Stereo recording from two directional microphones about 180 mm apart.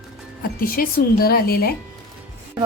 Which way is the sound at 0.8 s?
55° left (ahead or behind).